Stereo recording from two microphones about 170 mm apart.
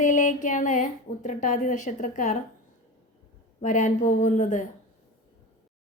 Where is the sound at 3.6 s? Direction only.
45° left (ahead or behind).